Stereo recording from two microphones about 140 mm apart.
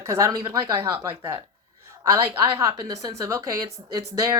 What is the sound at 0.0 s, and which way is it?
Speech, 20° right (ahead or behind).